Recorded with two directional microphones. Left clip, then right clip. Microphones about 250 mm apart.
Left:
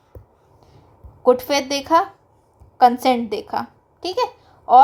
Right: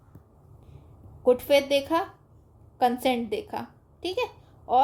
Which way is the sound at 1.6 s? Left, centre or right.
Centre.